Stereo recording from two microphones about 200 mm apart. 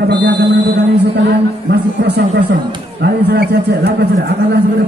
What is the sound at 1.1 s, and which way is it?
A man's voice, 55° right (ahead or behind).